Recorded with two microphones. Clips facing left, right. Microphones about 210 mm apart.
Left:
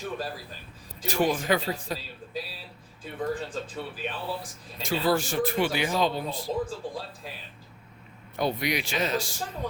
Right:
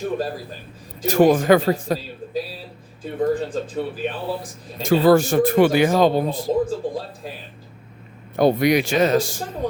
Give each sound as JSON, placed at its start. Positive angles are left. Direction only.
{"t": 0.0, "sound": "speech", "side_deg": -45}
{"t": 8.4, "sound": "speech", "side_deg": -50}